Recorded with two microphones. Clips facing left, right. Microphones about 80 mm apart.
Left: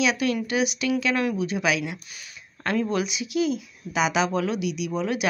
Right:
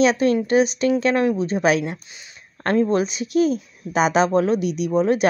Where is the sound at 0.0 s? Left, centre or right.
Right.